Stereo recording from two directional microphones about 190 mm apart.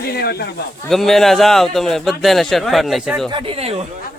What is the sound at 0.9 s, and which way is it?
Speech, centre (ahead or behind).